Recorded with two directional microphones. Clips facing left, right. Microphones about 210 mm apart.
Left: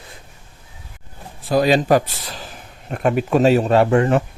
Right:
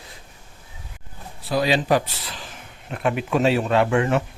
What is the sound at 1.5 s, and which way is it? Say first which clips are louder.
Speech: left 5 dB; 45° left (ahead or behind).